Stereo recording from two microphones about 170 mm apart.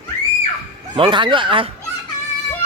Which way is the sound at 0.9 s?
30° right (ahead or behind).